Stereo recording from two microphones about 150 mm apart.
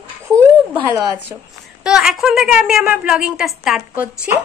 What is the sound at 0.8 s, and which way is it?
Speech, 20° right (ahead or behind).